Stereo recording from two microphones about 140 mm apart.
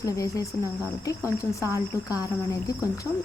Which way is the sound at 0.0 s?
25° left (ahead or behind).